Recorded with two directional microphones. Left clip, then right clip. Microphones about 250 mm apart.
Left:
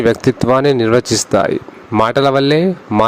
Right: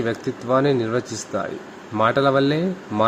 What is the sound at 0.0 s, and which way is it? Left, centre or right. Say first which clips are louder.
A man's voice: left 12 dB; left.